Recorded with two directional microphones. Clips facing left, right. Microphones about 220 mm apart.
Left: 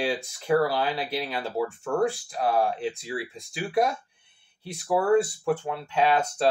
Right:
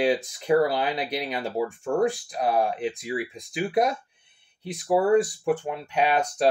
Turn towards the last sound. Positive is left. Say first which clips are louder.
# even
turn(degrees=-15)  # may be behind; listen again after turning